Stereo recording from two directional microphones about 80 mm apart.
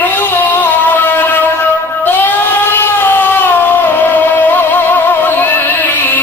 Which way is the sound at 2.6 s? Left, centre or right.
Left.